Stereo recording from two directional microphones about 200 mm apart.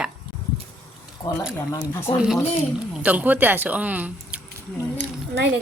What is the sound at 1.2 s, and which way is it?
Speech, 15° left (ahead or behind).